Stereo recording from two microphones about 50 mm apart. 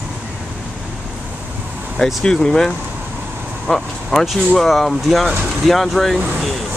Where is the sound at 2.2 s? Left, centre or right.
Centre.